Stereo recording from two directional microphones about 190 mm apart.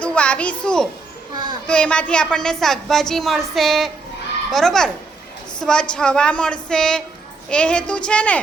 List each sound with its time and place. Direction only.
0.0 s a child's voice: 5° left (ahead or behind)